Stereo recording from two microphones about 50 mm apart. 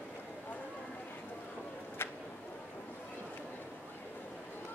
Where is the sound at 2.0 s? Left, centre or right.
Left.